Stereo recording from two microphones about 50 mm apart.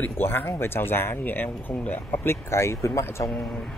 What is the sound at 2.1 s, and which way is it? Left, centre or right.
Speech, left.